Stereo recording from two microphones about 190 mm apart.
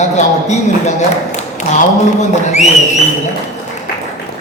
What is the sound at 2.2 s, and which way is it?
Speech, 35° left (ahead or behind).